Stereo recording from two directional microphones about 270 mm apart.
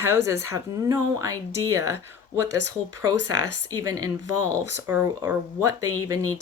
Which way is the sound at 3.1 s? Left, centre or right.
Right.